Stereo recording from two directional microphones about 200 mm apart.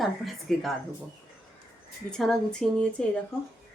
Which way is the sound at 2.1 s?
Centre (ahead or behind).